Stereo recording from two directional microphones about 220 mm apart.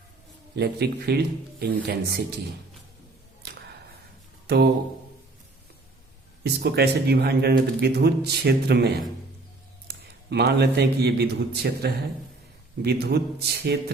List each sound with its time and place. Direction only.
0.5 s speech: 50° right (ahead or behind)
3.4 s a sound: 50° right (ahead or behind)
6.4 s a man's voice: 50° right (ahead or behind)